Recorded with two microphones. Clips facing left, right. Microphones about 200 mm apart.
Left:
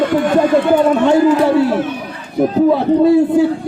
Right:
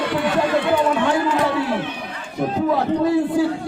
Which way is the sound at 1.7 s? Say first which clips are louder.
Left 6 dB; 45° left (ahead or behind).